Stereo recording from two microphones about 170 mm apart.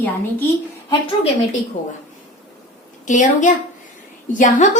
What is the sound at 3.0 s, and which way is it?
Speech, 45° left (ahead or behind).